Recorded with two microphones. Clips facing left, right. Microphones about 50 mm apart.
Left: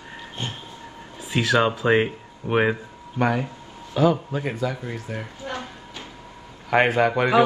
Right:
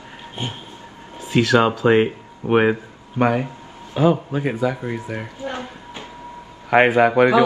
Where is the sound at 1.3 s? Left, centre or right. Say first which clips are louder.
Right 5 dB; centre.